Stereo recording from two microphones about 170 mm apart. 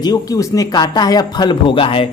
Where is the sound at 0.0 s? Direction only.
20° left (ahead or behind).